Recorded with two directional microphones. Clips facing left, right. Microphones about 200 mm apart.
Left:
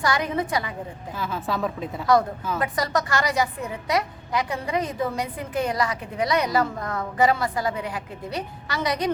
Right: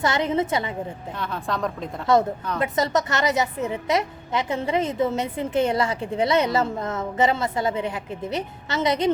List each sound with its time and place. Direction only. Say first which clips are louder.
0.0 s a woman's voice: right 2 dB; 25° right (ahead or behind)
1.1 s a woman's voice: left 2 dB; 5° left (ahead or behind)
2.1 s a woman's voice: right 1 dB; 25° right (ahead or behind)